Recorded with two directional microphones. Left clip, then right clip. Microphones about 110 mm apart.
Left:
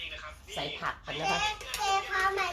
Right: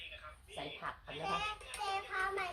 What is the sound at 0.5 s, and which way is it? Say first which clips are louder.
Speech: left 9 dB; 40° left (ahead or behind).